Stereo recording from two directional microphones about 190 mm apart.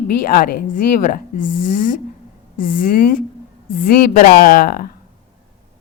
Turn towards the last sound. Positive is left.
turn(degrees=55)  # may be behind; listen again after turning